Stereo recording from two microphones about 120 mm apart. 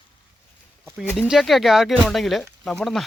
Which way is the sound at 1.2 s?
Centre (ahead or behind).